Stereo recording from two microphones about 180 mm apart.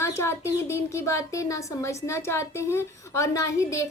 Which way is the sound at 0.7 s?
15° left (ahead or behind).